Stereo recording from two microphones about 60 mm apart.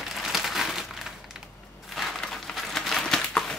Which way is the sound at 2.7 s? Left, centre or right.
Centre.